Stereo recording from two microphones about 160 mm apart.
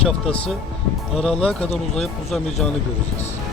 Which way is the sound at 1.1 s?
5° left (ahead or behind).